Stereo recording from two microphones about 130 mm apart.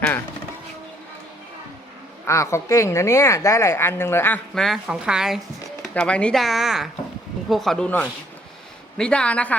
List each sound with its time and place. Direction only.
2.2 s a woman's voice: 20° left (ahead or behind)
4.5 s speech: centre (ahead or behind)
5.9 s speech: 10° left (ahead or behind)
7.9 s speech: 15° left (ahead or behind)